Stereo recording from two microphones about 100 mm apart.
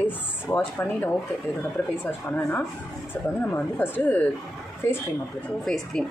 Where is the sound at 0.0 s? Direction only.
20° left (ahead or behind).